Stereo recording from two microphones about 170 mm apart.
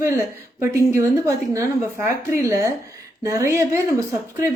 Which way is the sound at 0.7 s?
15° right (ahead or behind).